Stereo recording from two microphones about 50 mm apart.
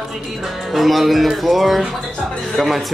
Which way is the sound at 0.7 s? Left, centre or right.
Centre.